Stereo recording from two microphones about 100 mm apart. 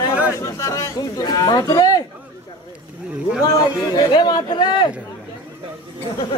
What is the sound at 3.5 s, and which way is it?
Speech, 45° left (ahead or behind).